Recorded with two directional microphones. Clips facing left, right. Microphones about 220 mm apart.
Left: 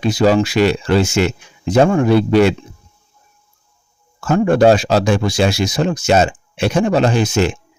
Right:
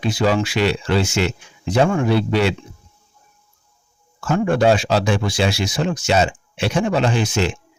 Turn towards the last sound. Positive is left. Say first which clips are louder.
# left 4 dB
turn(degrees=45)  # may be behind; listen again after turning